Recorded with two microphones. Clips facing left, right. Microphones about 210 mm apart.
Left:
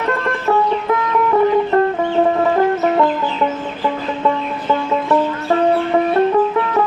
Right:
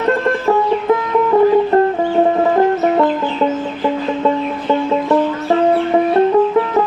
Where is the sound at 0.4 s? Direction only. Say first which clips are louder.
Right 1 dB; 25° right (ahead or behind).